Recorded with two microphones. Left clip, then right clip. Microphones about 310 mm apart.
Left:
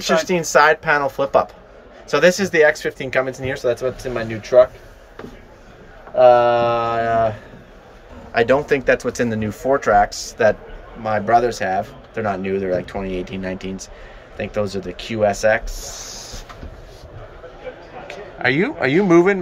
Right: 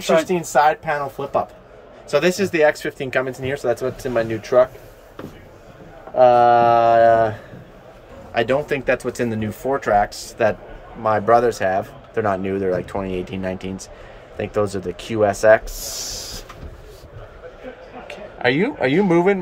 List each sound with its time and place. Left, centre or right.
0.3 s speech: centre
6.1 s speech: centre
15.8 s a sound: right
18.0 s a man's voice: centre